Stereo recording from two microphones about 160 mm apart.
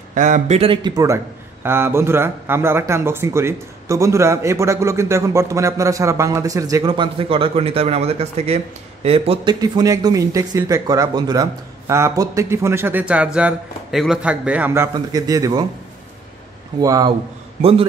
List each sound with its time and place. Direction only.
0.1 s a man's voice: 50° right (ahead or behind)
0.6 s a man's voice: 30° right (ahead or behind)
16.8 s a man's voice: 20° right (ahead or behind)
17.6 s a man's voice: 35° right (ahead or behind)